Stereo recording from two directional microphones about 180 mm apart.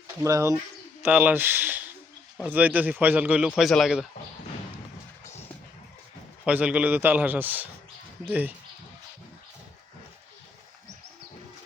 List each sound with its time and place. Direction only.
0.2 s a man's voice: 15° right (ahead or behind)
6.4 s a man's voice: 5° right (ahead or behind)